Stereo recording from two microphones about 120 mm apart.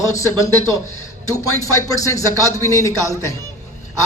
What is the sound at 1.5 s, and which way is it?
A woman's voice, 25° left (ahead or behind).